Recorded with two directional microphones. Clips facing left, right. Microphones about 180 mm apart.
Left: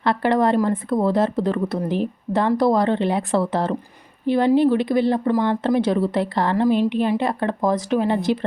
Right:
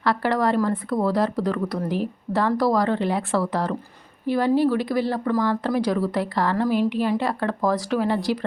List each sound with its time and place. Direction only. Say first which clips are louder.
0.0 s speech: left 3 dB; 20° left (ahead or behind)